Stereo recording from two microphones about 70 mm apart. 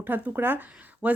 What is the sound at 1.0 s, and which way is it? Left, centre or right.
Speech, centre.